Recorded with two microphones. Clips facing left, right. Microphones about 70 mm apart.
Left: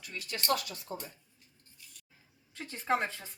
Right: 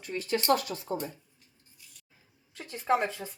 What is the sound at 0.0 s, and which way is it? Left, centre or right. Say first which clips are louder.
Speech: right 9 dB; right.